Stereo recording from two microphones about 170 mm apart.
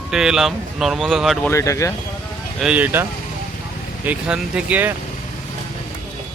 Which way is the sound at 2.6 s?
5° right (ahead or behind).